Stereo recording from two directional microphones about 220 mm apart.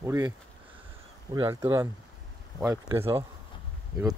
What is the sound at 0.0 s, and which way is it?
Speech, 15° right (ahead or behind).